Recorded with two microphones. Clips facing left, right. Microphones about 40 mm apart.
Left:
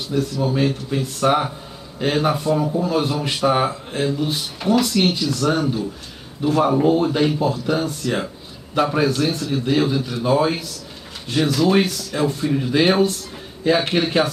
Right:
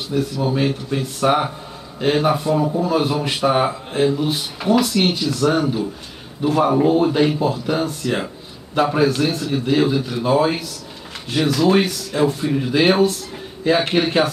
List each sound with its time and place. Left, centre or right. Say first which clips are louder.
0.1 s a man's voice: even; centre